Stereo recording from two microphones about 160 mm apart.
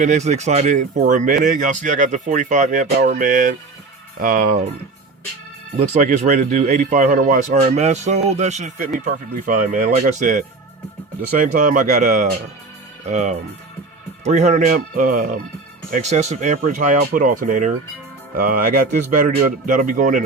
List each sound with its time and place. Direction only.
0.0 s speech: 45° right (ahead or behind)
5.7 s speech: 50° right (ahead or behind)
14.7 s speech: 55° right (ahead or behind)